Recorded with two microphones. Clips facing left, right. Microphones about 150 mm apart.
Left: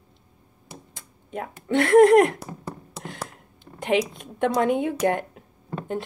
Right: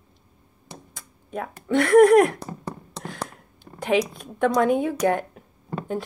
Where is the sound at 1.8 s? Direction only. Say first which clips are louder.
Even; 25° left (ahead or behind).